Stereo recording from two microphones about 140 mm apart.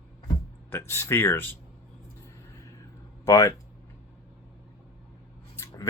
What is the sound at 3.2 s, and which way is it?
Speech, 20° left (ahead or behind).